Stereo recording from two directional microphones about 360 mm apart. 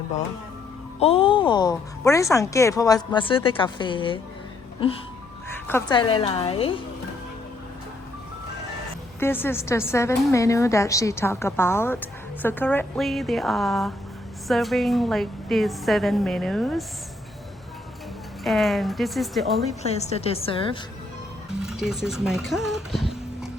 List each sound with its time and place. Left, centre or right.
0.9 s speech: centre
9.2 s a woman's voice: centre
18.4 s a woman's voice: centre
19.8 s speech: centre
21.6 s speech: centre